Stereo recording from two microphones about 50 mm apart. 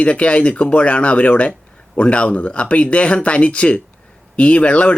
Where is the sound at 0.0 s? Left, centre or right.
Left.